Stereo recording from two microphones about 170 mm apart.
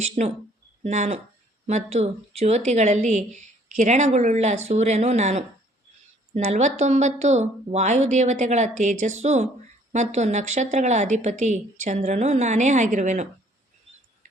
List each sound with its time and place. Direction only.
0.0 s a woman's voice: 40° right (ahead or behind)